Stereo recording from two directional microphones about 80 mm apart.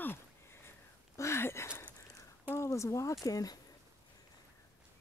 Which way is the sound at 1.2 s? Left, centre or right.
Left.